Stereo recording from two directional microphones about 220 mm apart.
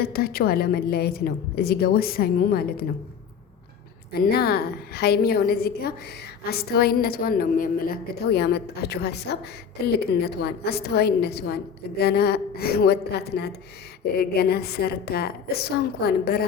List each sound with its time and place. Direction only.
0.0 s a woman's voice: 45° left (ahead or behind)
4.1 s a woman's voice: 45° left (ahead or behind)